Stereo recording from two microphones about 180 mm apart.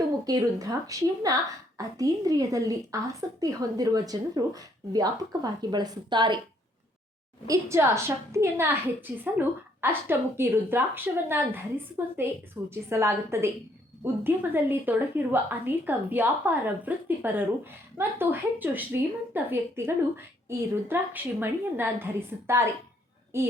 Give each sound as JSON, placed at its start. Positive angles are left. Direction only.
{"t": 0.3, "sound": "a woman's voice", "side_deg": -20}
{"t": 7.4, "sound": "a woman's voice", "side_deg": -15}